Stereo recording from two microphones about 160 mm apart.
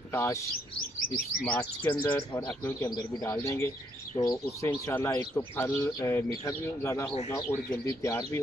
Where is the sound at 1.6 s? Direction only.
10° left (ahead or behind).